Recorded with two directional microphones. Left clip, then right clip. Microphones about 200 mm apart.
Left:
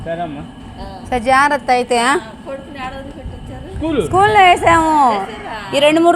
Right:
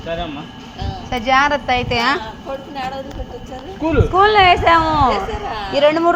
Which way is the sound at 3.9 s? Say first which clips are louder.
Left 1 dB; 35° left (ahead or behind).